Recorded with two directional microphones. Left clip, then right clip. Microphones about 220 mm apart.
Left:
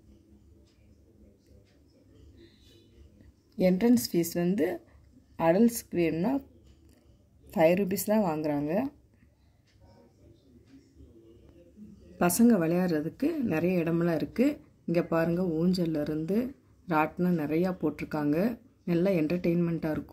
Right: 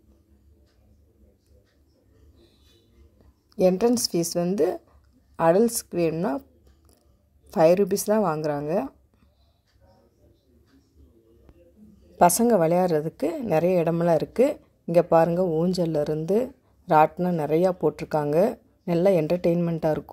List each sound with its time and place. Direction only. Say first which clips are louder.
3.5 s a woman's voice: right 5 dB; 30° right (ahead or behind)
7.4 s a woman's voice: right 6 dB; 30° right (ahead or behind)
12.2 s a woman's voice: right 7 dB; 35° right (ahead or behind)